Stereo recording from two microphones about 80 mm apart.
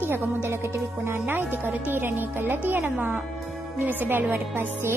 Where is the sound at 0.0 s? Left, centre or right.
Right.